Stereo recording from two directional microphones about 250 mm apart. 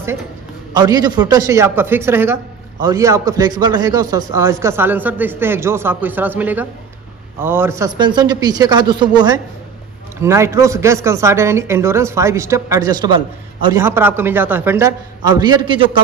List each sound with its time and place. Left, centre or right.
0.7 s speech: centre